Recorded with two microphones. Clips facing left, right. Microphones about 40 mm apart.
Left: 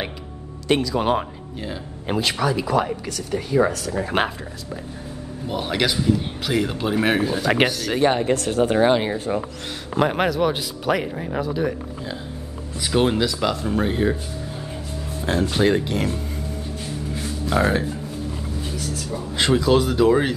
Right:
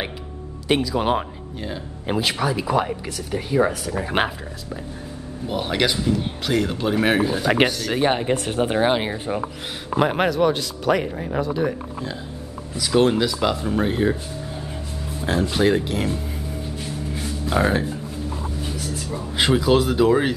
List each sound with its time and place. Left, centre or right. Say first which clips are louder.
0.7 s speech: even; centre
8.0 s speech: left 2 dB; centre
10.5 s speech: right 2 dB; centre
13.2 s speech: right 1 dB; centre
15.5 s speech: even; centre
17.5 s speech: even; centre